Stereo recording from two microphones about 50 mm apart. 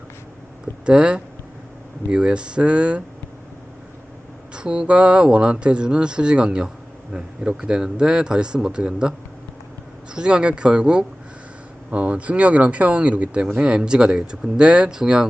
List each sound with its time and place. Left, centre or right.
0.6 s speech: right
4.5 s speech: centre
10.2 s speech: centre
13.6 s speech: centre